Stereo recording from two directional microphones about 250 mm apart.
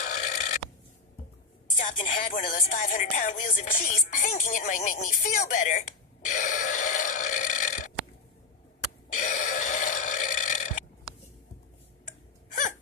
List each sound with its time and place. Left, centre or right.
0.0 s burping: left
1.7 s a sound: left
2.0 s speech: left
2.5 s music: left
9.1 s burping: left